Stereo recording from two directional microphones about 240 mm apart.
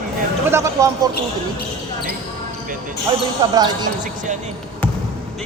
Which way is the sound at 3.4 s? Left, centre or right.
Centre.